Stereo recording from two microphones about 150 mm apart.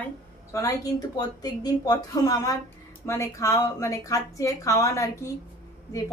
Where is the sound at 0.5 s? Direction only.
20° left (ahead or behind).